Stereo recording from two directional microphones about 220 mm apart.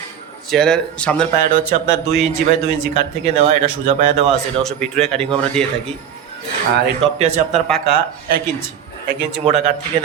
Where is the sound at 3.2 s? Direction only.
30° right (ahead or behind).